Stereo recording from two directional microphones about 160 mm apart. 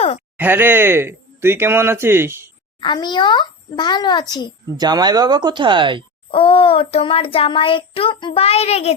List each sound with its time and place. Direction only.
0.3 s speech: 10° right (ahead or behind)
2.8 s a child's voice: 30° left (ahead or behind)
4.8 s speech: 25° right (ahead or behind)
6.3 s a child's voice: 35° left (ahead or behind)